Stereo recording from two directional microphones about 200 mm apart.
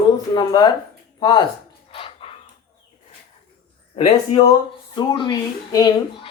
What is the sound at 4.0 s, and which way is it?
Speech, 25° left (ahead or behind).